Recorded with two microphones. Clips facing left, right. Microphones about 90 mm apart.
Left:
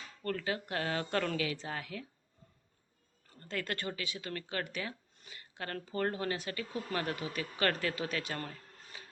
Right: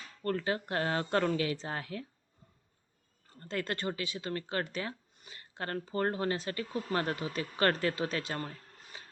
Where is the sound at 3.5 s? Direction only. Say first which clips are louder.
Right 3 dB; 30° right (ahead or behind).